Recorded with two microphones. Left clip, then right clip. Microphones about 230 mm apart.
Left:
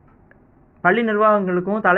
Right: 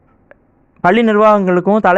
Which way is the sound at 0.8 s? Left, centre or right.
Right.